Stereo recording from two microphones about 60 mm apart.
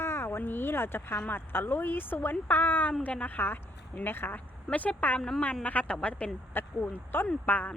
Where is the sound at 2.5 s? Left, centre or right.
Left.